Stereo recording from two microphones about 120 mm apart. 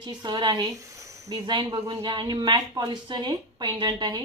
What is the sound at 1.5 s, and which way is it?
Speech, 40° right (ahead or behind).